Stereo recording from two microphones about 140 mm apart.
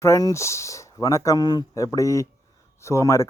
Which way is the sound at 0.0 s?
25° left (ahead or behind).